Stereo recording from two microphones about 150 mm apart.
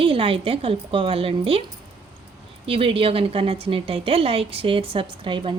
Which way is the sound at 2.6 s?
40° right (ahead or behind).